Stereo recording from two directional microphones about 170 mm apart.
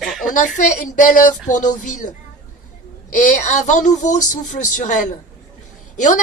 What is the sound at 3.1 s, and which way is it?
Speech, 45° left (ahead or behind).